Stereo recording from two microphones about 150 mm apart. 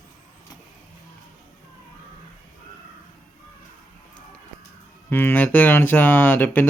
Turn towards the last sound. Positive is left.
turn(degrees=10)  # may be behind; listen again after turning